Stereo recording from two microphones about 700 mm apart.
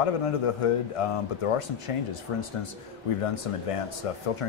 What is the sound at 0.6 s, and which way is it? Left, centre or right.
Speech, left.